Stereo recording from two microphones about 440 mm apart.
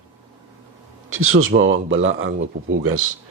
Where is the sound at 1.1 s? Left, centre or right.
Right.